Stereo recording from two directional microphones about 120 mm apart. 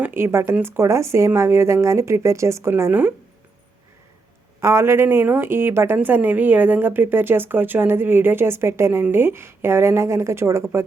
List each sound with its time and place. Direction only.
0.0 s speech: 20° right (ahead or behind)
4.6 s speech: 20° right (ahead or behind)